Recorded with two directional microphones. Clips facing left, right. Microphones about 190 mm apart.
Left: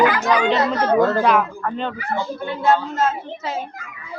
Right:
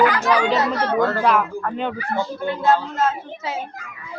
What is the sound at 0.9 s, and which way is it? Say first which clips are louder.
Speech: left 3 dB; 35° left (ahead or behind).